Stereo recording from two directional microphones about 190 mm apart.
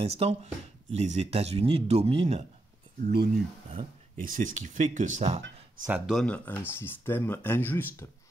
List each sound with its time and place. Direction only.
0.0 s speech: 30° right (ahead or behind)
3.0 s speech: 55° right (ahead or behind)
4.2 s speech: 40° right (ahead or behind)
5.9 s speech: 5° right (ahead or behind); by 8.1 s 10° left (ahead or behind)